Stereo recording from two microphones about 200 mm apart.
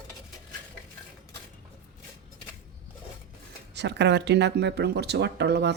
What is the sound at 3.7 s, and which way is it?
Speech, 60° right (ahead or behind).